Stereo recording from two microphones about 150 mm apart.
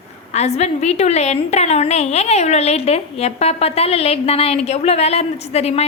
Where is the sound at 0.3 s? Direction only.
50° left (ahead or behind).